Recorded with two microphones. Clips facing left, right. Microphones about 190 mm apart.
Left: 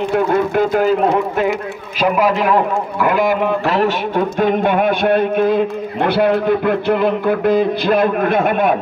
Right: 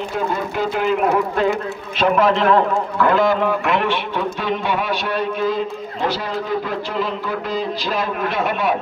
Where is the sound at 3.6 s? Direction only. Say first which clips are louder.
Left 4 dB; 40° left (ahead or behind).